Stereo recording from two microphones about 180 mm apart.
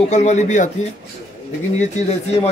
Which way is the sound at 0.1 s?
40° left (ahead or behind).